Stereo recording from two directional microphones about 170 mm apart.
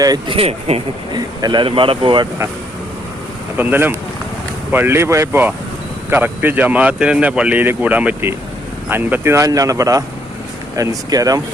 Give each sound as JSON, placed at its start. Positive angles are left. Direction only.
{"t": 0.0, "sound": "speech", "side_deg": -20}
{"t": 0.3, "sound": "speech", "side_deg": -35}
{"t": 3.6, "sound": "speech", "side_deg": -10}